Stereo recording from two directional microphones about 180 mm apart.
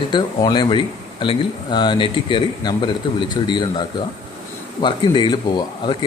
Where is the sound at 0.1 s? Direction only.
25° left (ahead or behind).